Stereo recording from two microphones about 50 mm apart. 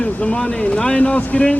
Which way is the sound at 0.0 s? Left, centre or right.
Left.